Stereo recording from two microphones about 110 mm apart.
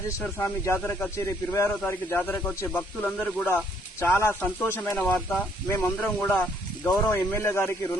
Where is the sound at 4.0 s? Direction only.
20° left (ahead or behind).